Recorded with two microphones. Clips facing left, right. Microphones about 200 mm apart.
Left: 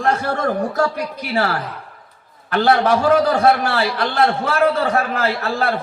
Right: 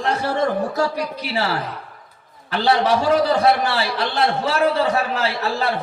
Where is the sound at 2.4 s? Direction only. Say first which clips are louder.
Left 3 dB; 55° left (ahead or behind).